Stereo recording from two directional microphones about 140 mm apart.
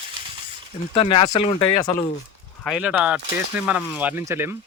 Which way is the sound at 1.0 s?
45° left (ahead or behind).